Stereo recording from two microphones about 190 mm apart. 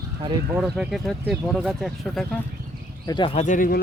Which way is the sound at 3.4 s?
45° left (ahead or behind).